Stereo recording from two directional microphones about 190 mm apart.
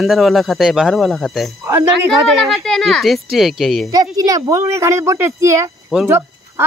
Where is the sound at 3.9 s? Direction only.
20° right (ahead or behind).